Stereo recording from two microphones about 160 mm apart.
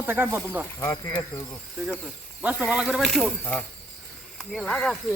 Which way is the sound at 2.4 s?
5° right (ahead or behind).